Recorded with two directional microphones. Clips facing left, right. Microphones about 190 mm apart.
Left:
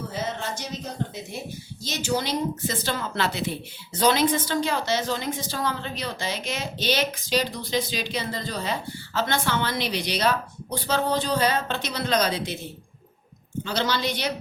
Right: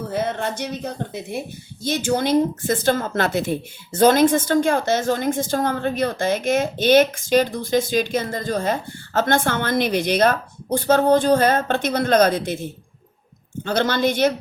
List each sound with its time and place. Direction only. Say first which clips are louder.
0.1 s speech: right 9 dB; 60° right (ahead or behind)